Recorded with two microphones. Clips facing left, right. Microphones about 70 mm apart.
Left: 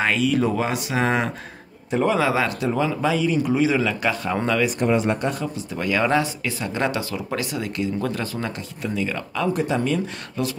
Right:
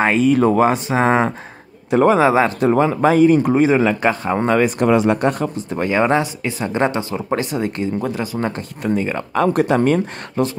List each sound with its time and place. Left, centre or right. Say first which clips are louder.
0.0 s a man's voice: right 6 dB; right
2.6 s a man's voice: right 7 dB; right
4.7 s speech: right 6 dB; right
5.2 s speech: right 7 dB; right
8.0 s speech: right 3 dB; centre
8.4 s a man's voice: right 6 dB; right
9.4 s speech: right 7 dB; right